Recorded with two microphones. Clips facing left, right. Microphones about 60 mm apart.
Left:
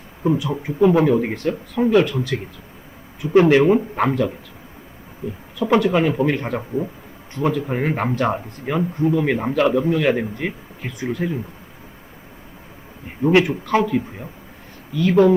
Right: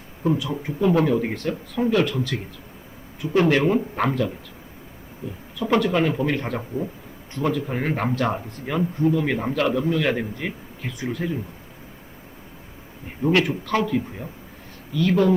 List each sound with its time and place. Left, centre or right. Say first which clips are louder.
0.2 s speech: left 3 dB; centre
5.5 s speech: left 3 dB; centre
13.2 s speech: left 4 dB; centre